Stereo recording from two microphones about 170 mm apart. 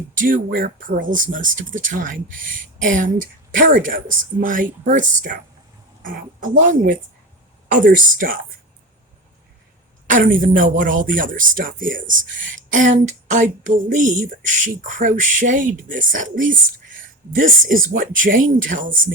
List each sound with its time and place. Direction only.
0.1 s speech: 50° right (ahead or behind)
10.1 s speech: 50° right (ahead or behind)